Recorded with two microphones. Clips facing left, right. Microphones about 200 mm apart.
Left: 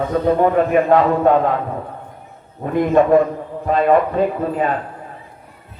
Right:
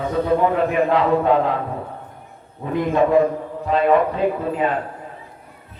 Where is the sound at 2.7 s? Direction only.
50° left (ahead or behind).